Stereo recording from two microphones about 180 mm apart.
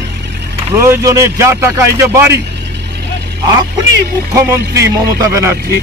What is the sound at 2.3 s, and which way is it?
Vehicle, 70° right (ahead or behind).